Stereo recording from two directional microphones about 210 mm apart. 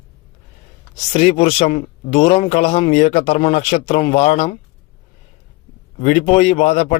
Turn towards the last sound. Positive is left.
turn(degrees=30)  # may be behind; listen again after turning